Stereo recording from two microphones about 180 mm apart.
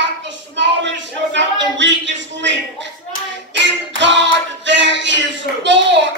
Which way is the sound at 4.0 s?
85° right.